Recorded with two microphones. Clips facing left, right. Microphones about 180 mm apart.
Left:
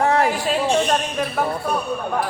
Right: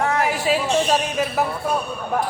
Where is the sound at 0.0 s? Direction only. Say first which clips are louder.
Left 3 dB; 30° left (ahead or behind).